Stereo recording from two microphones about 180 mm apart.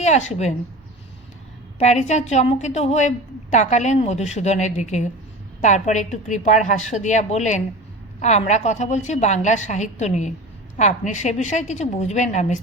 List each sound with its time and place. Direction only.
0.0 s a woman's voice: 40° left (ahead or behind)
1.8 s a woman's voice: 40° left (ahead or behind)